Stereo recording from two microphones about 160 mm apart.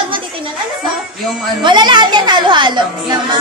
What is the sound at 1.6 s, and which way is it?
A woman's voice, 30° right (ahead or behind).